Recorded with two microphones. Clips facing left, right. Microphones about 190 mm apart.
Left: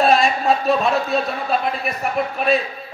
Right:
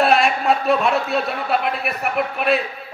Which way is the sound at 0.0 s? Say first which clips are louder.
Left 1 dB; 65° right (ahead or behind).